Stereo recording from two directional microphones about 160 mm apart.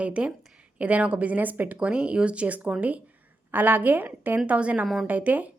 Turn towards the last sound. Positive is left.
turn(degrees=-10)  # may be behind; listen again after turning